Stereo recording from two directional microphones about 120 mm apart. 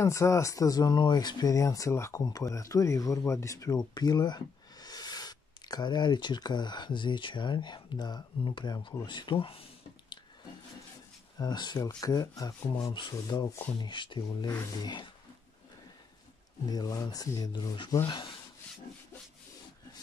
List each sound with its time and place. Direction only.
0.0 s speech: 25° left (ahead or behind); by 10.1 s 50° left (ahead or behind)
11.3 s speech: 35° left (ahead or behind)
13.1 s speech: 30° left (ahead or behind)
13.7 s speech: 40° left (ahead or behind)
16.6 s speech: 30° left (ahead or behind)
18.0 s speech: 45° left (ahead or behind)